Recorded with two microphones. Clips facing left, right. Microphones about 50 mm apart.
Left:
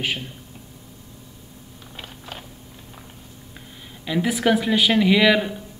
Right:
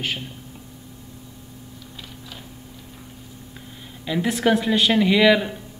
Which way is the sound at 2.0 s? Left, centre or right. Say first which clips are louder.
Left 4 dB; left.